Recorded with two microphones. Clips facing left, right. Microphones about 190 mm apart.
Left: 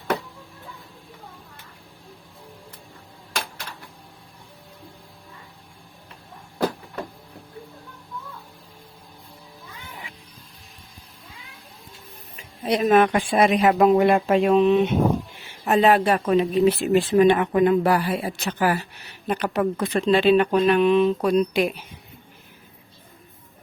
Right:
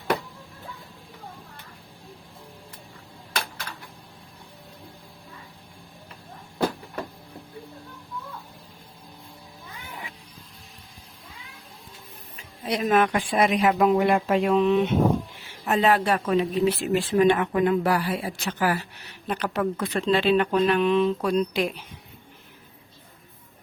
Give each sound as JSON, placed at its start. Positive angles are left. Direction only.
{"t": 12.6, "sound": "speech", "side_deg": 25}